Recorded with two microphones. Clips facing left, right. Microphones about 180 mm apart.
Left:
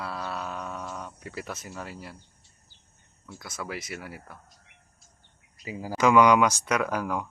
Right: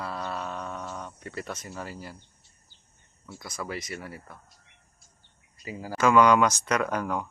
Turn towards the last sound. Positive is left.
turn(degrees=5)  # may be behind; listen again after turning